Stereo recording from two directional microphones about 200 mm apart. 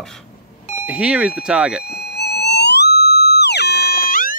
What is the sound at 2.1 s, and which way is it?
Music, 55° left (ahead or behind).